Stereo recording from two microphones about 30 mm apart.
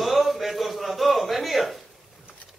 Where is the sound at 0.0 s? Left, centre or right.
Centre.